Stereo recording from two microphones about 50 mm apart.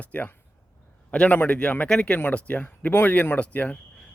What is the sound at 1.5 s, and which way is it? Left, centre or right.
A man's voice, left.